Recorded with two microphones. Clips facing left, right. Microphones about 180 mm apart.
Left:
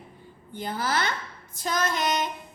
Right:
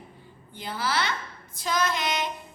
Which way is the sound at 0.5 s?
45° left (ahead or behind).